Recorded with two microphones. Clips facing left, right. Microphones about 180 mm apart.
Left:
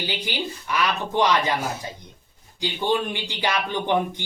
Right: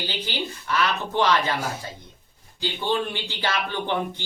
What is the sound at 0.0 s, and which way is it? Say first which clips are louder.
A man's voice: left 1 dB; 15° left (ahead or behind).